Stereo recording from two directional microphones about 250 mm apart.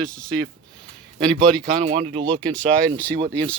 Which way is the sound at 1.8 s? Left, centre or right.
Right.